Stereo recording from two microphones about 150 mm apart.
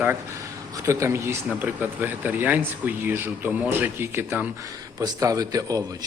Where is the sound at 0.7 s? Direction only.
20° right (ahead or behind).